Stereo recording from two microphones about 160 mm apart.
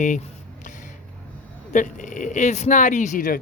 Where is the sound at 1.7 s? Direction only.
55° left (ahead or behind).